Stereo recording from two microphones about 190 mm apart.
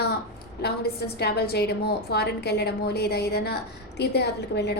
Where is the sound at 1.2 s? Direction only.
60° left (ahead or behind).